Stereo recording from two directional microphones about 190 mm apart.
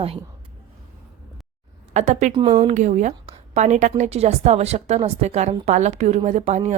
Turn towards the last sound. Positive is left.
turn(degrees=-35)  # may be behind; listen again after turning